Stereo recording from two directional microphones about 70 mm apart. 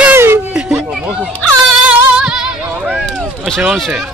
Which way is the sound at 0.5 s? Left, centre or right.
Centre.